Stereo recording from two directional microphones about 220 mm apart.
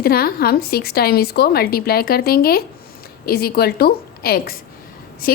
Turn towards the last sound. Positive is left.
turn(degrees=45)  # may be behind; listen again after turning